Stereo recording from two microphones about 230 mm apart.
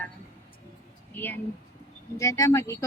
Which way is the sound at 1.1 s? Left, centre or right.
Centre.